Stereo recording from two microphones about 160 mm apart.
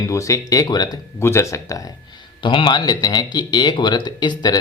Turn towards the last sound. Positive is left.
turn(degrees=25)  # may be behind; listen again after turning